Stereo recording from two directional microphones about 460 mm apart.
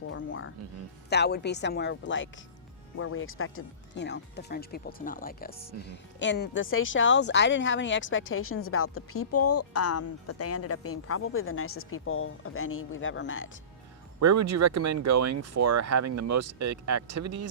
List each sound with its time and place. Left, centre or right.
0.1 s speech: left
14.2 s speech: right